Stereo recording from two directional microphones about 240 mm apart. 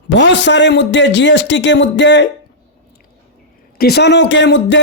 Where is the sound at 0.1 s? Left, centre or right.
Left.